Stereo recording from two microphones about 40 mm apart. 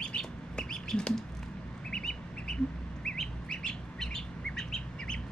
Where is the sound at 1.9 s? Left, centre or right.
Centre.